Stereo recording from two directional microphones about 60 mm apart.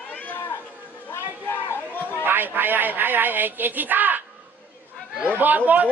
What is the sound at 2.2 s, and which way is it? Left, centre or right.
Speech, right.